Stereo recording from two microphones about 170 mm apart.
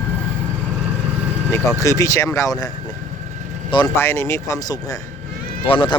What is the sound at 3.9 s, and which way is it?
Speech, 15° left (ahead or behind).